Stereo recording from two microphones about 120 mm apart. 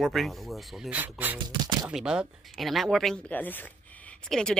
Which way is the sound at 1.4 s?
40° right (ahead or behind).